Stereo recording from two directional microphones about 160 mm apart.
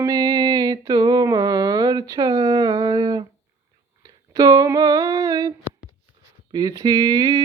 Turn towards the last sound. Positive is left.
turn(degrees=-25)  # may be behind; listen again after turning